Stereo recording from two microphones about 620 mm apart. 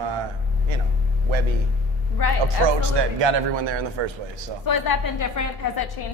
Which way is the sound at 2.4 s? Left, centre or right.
Right.